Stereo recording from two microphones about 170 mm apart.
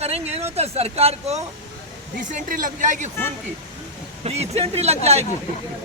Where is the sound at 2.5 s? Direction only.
50° right (ahead or behind).